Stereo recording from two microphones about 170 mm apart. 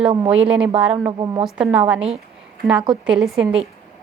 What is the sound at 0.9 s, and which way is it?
Speech, 20° right (ahead or behind).